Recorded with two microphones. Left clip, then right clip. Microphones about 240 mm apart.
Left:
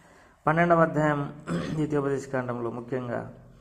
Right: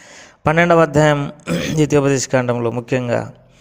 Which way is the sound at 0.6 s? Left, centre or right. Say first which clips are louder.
Right 10 dB; right.